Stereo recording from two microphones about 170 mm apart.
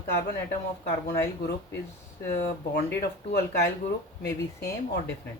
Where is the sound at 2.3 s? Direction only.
70° left (ahead or behind).